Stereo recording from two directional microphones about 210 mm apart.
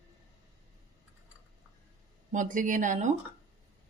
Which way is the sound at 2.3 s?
40° right (ahead or behind).